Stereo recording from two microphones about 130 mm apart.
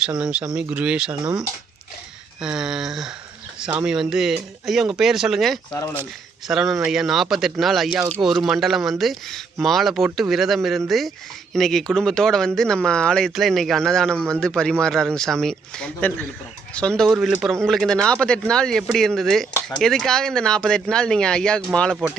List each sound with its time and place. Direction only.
0.2 s speech: 5° right (ahead or behind)
1.2 s speech: 30° right (ahead or behind)
2.4 s speech: 5° right (ahead or behind)
17.1 s speech: 5° right (ahead or behind)